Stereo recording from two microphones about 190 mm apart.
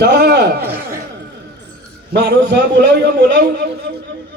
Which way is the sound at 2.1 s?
60° right (ahead or behind).